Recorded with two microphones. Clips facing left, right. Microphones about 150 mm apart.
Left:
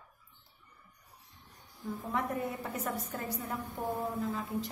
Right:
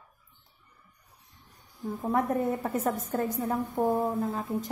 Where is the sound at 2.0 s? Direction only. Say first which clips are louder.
Right 8 dB; 50° right (ahead or behind).